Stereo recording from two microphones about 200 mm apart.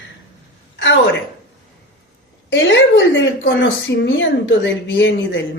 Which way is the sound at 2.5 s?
65° left (ahead or behind).